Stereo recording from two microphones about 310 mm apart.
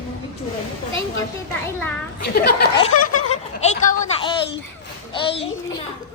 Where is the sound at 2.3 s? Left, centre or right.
Left.